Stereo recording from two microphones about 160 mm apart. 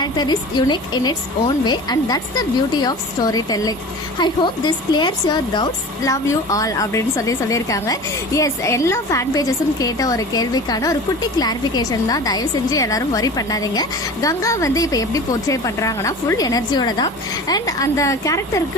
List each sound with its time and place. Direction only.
0.0 s speech: 25° left (ahead or behind)